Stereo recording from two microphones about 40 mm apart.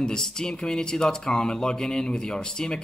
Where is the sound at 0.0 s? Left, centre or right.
Centre.